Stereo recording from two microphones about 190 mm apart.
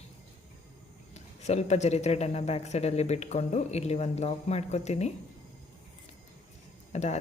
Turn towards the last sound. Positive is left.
turn(degrees=35)  # may be behind; listen again after turning